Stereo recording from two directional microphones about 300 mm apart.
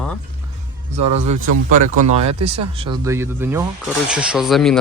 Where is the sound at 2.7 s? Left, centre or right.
Centre.